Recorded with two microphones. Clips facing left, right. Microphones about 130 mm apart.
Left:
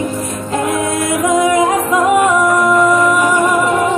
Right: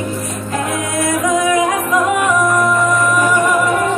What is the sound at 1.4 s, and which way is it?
Music, 25° left (ahead or behind).